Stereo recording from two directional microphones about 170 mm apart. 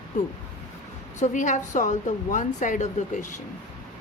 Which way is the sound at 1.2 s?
45° left (ahead or behind).